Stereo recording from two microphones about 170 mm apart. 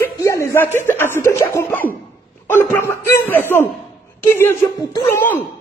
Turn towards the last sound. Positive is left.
turn(degrees=15)  # may be behind; listen again after turning